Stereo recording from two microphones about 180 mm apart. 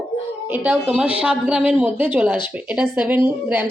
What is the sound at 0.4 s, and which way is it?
A woman's voice, 10° right (ahead or behind).